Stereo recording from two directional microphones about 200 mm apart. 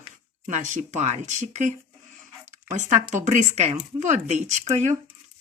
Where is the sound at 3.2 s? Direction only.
35° right (ahead or behind).